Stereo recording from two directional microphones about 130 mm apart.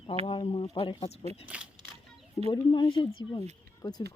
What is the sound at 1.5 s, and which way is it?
Speech, 10° right (ahead or behind).